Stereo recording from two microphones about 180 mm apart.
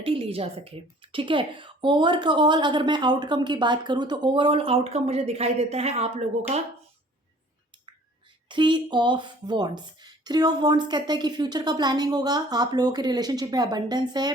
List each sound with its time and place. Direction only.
0.0 s a woman's voice: 30° right (ahead or behind)
8.4 s a woman's voice: 25° right (ahead or behind)